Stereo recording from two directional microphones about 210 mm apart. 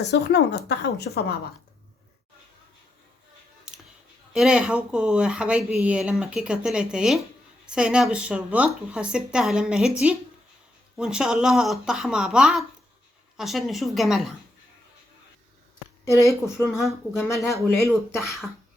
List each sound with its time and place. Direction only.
0.1 s speech: 55° left (ahead or behind)
4.3 s speech: 5° right (ahead or behind)
10.9 s speech: 5° right (ahead or behind)
16.0 s speech: 15° left (ahead or behind)